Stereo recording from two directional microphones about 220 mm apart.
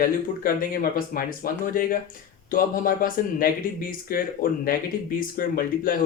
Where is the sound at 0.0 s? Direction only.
40° left (ahead or behind).